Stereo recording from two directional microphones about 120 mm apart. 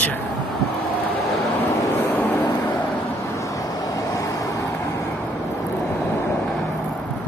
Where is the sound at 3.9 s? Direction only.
30° left (ahead or behind).